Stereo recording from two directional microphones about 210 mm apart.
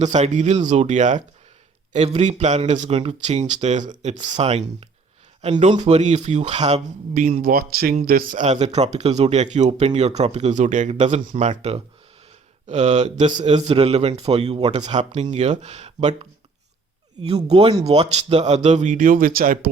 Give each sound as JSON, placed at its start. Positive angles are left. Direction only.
{"t": 0.0, "sound": "speech", "side_deg": -35}
{"t": 17.2, "sound": "speech", "side_deg": -30}